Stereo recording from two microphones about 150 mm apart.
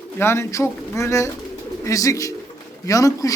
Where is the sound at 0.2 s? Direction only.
15° left (ahead or behind).